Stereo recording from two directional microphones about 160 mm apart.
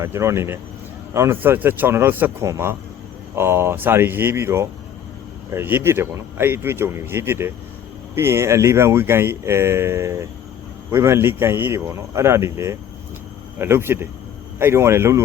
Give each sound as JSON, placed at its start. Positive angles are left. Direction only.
{"t": 0.0, "sound": "speech", "side_deg": -15}